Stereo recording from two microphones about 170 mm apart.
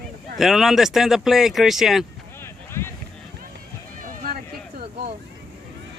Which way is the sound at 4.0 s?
55° right (ahead or behind).